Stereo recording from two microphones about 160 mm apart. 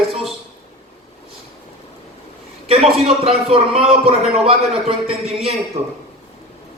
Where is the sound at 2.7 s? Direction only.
40° right (ahead or behind).